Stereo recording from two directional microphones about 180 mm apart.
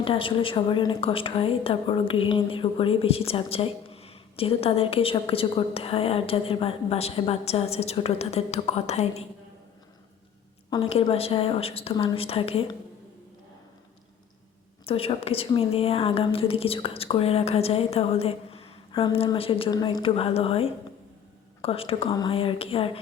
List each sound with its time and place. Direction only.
0.0 s a woman's voice: 30° left (ahead or behind)
10.7 s a woman's voice: 30° left (ahead or behind)
14.8 s a woman's voice: 30° left (ahead or behind)